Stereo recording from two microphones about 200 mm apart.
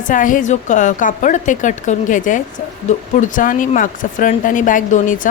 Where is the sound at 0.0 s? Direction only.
40° left (ahead or behind).